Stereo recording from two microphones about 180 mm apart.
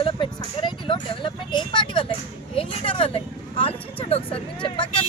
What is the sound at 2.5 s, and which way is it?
Vehicle, 30° left (ahead or behind).